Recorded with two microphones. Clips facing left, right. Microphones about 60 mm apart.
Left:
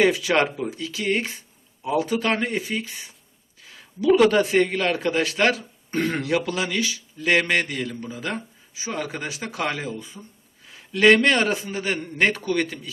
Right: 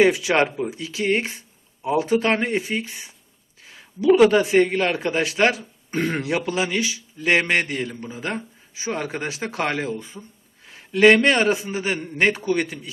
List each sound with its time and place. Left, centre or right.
0.0 s a man's voice: centre
3.7 s a sound: right
4.1 s a man's voice: centre; by 10.2 s right
10.9 s a man's voice: right